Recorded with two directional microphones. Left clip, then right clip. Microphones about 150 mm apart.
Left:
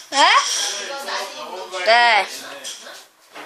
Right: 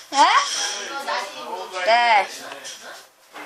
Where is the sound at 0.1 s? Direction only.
30° left (ahead or behind).